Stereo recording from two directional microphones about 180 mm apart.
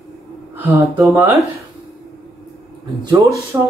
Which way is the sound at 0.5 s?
15° right (ahead or behind).